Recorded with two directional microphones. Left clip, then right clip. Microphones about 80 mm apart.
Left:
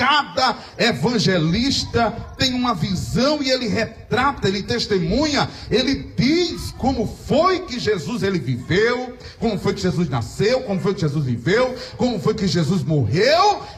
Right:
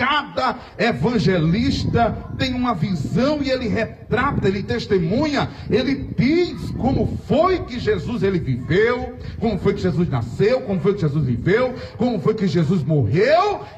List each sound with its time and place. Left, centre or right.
0.0 s a man's voice: right